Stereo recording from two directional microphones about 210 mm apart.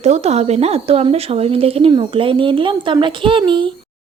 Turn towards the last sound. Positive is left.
turn(degrees=-25)  # may be behind; listen again after turning